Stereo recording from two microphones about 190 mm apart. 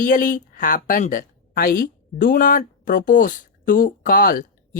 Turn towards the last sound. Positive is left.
turn(degrees=50)  # may be behind; listen again after turning